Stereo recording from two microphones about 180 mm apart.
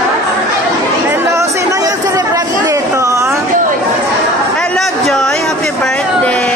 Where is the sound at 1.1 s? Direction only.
15° right (ahead or behind).